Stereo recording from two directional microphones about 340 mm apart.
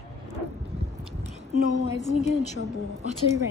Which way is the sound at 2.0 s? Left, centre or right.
Centre.